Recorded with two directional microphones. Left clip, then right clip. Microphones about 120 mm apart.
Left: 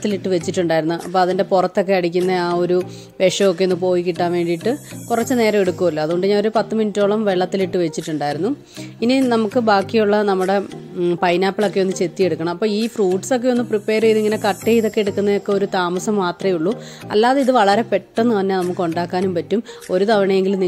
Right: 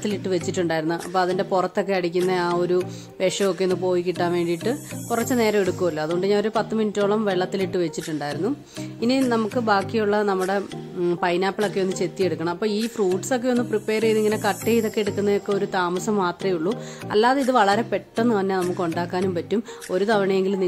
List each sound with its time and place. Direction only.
0.0 s speech: 30° left (ahead or behind)
9.6 s speech: 40° left (ahead or behind)